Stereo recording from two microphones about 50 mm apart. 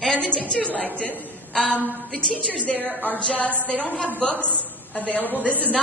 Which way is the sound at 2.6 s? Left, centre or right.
Left.